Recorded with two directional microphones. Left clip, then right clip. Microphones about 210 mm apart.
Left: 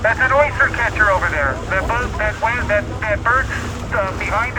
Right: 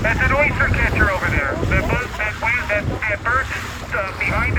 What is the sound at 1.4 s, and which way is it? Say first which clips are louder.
Speech: left 2 dB; 30° left (ahead or behind).